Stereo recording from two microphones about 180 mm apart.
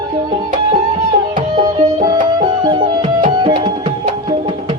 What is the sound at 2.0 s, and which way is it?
Music, 25° right (ahead or behind).